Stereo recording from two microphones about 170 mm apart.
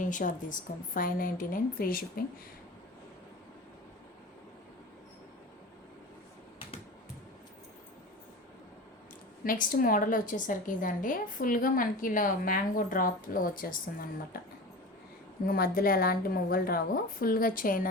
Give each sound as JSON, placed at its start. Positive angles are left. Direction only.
{"t": 0.0, "sound": "a woman's voice", "side_deg": 50}
{"t": 9.4, "sound": "a woman's voice", "side_deg": 55}
{"t": 15.4, "sound": "a woman's voice", "side_deg": 60}